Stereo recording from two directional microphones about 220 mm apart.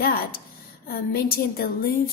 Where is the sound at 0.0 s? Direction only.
45° left (ahead or behind).